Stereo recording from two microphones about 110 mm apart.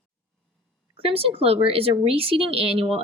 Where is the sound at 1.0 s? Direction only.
55° right (ahead or behind).